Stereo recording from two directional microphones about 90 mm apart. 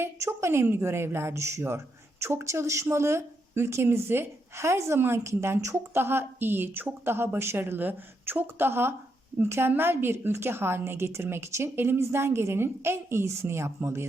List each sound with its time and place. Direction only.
0.0 s speech: 30° right (ahead or behind)